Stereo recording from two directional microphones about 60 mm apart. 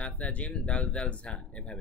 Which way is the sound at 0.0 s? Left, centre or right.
Left.